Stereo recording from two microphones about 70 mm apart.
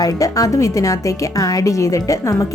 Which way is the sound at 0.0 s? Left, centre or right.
Left.